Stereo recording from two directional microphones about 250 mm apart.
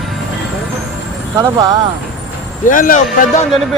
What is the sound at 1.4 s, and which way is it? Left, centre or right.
Speech, centre.